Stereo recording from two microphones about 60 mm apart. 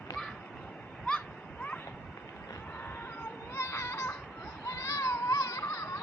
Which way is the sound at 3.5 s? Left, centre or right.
Left.